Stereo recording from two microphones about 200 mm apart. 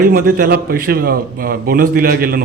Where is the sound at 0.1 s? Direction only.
50° right (ahead or behind).